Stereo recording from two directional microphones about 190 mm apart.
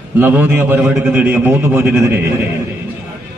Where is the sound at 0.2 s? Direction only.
10° right (ahead or behind).